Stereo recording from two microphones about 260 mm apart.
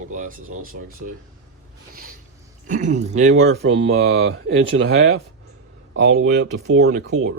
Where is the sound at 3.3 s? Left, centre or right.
Right.